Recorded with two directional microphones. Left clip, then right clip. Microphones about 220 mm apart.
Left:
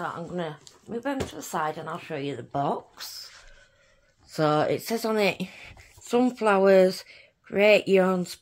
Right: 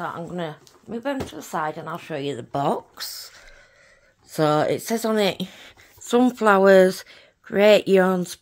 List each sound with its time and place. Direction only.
0.0 s speech: 40° right (ahead or behind)
1.3 s speech: 30° right (ahead or behind); by 2.8 s 55° right (ahead or behind)
3.0 s speech: 35° right (ahead or behind)
4.3 s speech: 30° right (ahead or behind)